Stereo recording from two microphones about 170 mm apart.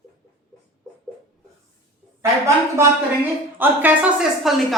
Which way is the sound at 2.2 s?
15° right (ahead or behind).